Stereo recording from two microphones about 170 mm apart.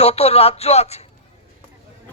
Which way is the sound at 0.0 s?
35° left (ahead or behind).